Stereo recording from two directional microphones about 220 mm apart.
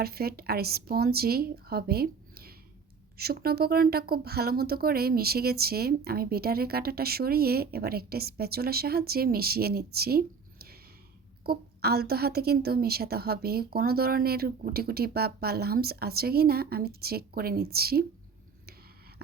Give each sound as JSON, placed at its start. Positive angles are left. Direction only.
{"t": 0.0, "sound": "a woman's voice", "side_deg": -45}